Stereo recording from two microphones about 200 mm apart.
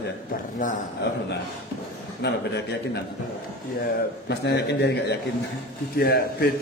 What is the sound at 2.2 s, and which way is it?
Speech, 60° left (ahead or behind).